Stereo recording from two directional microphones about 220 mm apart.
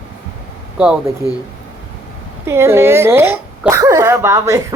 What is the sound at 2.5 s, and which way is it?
Speech, 10° right (ahead or behind).